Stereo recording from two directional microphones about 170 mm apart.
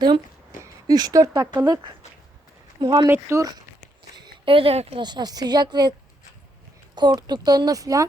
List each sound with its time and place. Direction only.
0.6 s a woman's voice: 25° right (ahead or behind)
4.2 s a woman's voice: 30° right (ahead or behind)
6.9 s a woman's voice: 25° right (ahead or behind)